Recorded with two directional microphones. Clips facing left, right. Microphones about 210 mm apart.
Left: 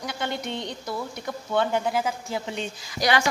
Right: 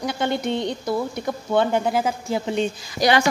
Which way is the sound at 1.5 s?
30° right (ahead or behind).